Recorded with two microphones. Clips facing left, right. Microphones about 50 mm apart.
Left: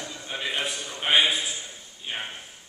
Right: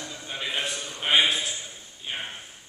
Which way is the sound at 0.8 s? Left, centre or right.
Centre.